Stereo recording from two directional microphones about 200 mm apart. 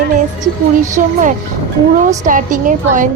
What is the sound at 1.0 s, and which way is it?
A woman's voice, 40° right (ahead or behind).